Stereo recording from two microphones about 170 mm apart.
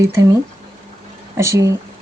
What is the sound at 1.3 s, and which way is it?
Speech, 15° right (ahead or behind).